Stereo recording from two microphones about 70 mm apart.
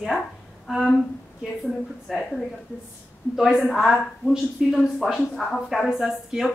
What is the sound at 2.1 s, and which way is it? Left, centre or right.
Speech, centre.